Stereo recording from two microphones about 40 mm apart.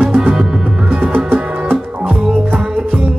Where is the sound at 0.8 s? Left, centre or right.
Right.